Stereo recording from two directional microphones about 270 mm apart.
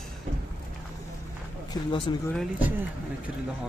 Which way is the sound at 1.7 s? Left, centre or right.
Centre.